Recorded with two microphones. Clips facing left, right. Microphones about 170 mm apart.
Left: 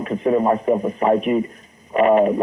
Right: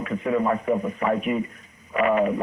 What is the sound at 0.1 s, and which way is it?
A man's voice, 35° left (ahead or behind).